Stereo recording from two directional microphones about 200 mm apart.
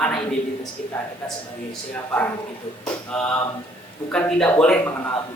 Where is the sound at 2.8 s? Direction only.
5° left (ahead or behind).